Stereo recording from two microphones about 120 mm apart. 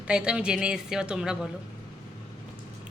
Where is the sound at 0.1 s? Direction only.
10° right (ahead or behind).